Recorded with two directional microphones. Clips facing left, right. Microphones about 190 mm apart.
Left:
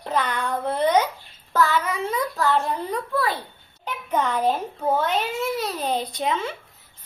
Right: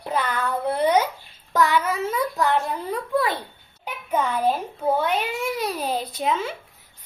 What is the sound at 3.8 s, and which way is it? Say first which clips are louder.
Babbling: even; 10° right (ahead or behind).